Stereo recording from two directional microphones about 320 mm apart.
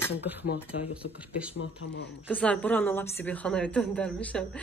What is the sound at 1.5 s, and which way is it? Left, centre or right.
Speech, left.